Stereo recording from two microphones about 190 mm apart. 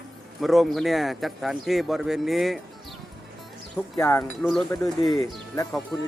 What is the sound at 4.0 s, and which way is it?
Speech, 10° left (ahead or behind).